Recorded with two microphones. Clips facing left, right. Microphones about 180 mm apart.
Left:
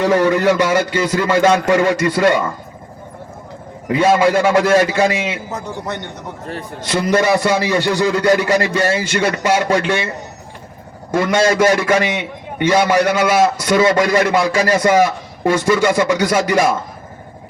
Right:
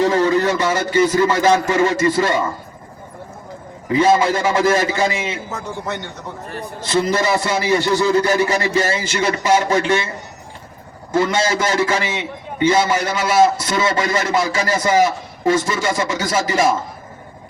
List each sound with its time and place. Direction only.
0.0 s a man's voice: 70° left (ahead or behind)
3.8 s a man's voice: 70° left (ahead or behind)
5.5 s a man's voice: 15° left (ahead or behind)
6.5 s a man's voice: 70° left (ahead or behind)
11.1 s a man's voice: 65° left (ahead or behind)